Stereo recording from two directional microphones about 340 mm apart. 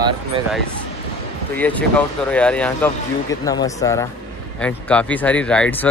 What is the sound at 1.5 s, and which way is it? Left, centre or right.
Speech, centre.